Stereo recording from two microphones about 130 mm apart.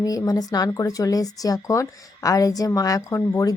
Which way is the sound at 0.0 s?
25° left (ahead or behind).